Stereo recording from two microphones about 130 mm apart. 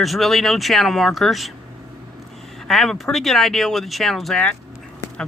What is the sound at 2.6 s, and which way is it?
Speech, 5° left (ahead or behind).